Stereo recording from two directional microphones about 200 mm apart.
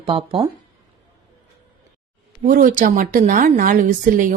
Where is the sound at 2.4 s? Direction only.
45° right (ahead or behind).